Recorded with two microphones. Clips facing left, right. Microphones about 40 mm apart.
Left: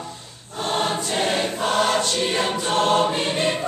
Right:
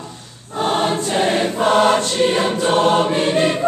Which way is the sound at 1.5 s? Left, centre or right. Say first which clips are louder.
Right 8 dB; right.